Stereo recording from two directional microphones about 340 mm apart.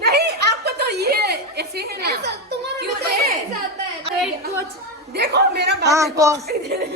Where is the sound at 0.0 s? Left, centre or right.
Right.